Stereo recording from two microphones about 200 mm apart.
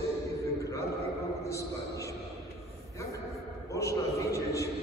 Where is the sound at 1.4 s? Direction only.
15° left (ahead or behind).